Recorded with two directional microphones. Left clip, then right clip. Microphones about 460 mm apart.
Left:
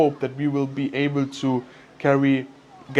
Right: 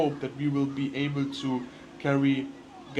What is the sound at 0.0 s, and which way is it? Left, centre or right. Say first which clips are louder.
Speech: left 7 dB; left.